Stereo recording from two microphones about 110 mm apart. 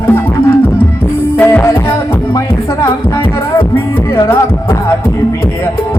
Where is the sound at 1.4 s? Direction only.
25° left (ahead or behind).